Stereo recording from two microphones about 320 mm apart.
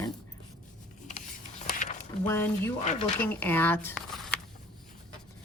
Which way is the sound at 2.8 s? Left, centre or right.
Left.